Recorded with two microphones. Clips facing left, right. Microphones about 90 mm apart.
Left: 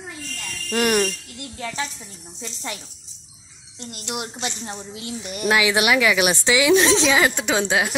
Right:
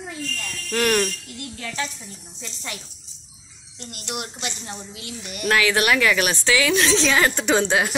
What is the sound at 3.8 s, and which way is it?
A woman's voice, 25° left (ahead or behind).